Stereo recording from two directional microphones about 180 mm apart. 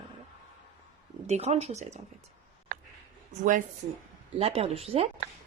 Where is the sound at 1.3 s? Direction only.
35° right (ahead or behind).